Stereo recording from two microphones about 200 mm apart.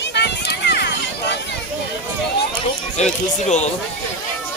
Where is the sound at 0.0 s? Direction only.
60° left (ahead or behind).